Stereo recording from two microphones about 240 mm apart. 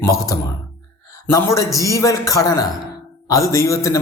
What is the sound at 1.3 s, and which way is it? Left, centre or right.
Speech, centre.